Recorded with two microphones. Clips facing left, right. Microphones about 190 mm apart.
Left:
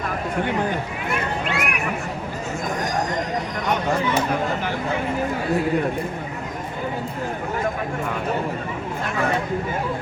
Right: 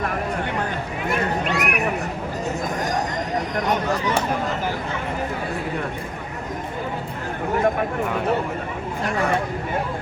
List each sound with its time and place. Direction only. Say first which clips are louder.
1.5 s speech: right 3 dB; 40° right (ahead or behind)